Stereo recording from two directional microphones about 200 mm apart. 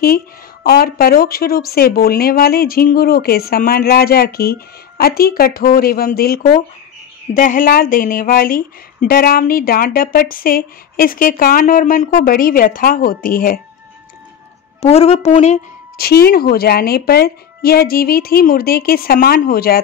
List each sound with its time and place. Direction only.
0.7 s speech: 50° left (ahead or behind)
14.8 s speech: 30° left (ahead or behind)
16.0 s speech: 50° left (ahead or behind)